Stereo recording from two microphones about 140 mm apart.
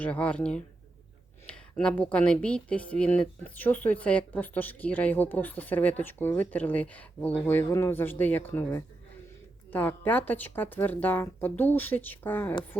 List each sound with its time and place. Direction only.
0.0 s speech: 10° left (ahead or behind)
1.5 s a sound: 5° left (ahead or behind)
2.1 s speech: 5° left (ahead or behind)